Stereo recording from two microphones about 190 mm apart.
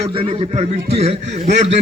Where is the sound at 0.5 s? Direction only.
35° right (ahead or behind).